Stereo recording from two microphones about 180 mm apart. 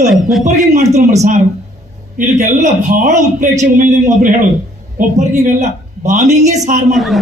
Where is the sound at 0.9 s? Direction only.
40° right (ahead or behind).